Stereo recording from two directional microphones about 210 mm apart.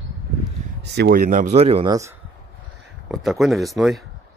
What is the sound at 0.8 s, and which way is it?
A man's voice, 55° right (ahead or behind).